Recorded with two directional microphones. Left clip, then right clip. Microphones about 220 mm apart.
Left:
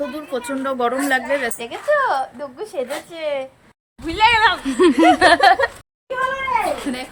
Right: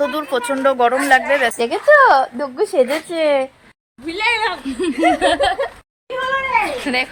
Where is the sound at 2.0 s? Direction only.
45° right (ahead or behind).